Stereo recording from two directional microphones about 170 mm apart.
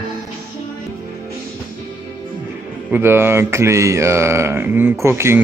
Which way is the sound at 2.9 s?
15° right (ahead or behind).